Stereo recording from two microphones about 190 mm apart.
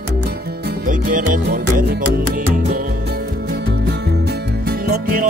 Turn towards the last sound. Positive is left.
turn(degrees=-50)  # may be behind; listen again after turning